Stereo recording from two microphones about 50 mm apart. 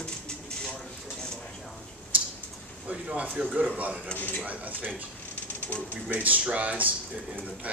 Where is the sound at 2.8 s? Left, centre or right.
Right.